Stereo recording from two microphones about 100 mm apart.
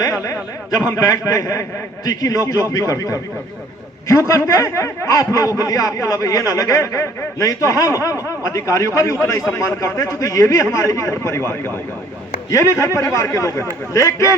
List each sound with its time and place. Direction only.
0.8 s a man's voice: 35° left (ahead or behind)